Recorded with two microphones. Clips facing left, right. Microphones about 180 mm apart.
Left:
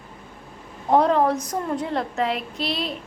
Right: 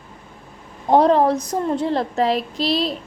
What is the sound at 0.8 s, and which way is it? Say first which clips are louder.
A woman's voice: right 4 dB; 35° right (ahead or behind).